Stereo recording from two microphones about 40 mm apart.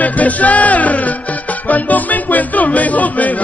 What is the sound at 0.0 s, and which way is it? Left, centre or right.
Music, left.